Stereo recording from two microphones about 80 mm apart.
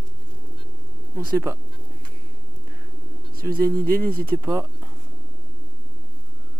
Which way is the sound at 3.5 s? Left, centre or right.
Right.